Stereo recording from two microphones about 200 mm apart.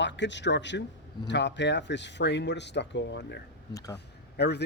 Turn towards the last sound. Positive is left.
turn(degrees=55)  # may be behind; listen again after turning